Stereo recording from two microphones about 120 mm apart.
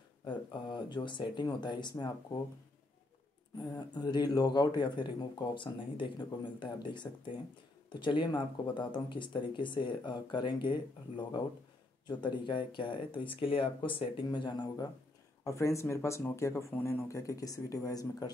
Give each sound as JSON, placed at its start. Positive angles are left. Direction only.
{"t": 0.2, "sound": "speech", "side_deg": 40}
{"t": 3.7, "sound": "speech", "side_deg": 35}
{"t": 15.4, "sound": "speech", "side_deg": 25}